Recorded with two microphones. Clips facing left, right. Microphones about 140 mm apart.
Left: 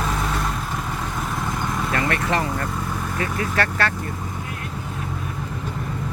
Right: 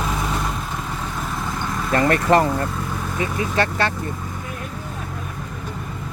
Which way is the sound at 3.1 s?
20° right (ahead or behind).